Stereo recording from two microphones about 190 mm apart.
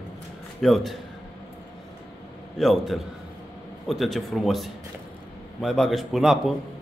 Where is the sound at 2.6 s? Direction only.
Centre (ahead or behind).